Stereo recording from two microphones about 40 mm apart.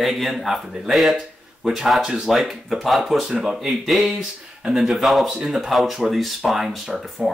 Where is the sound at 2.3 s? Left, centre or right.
Centre.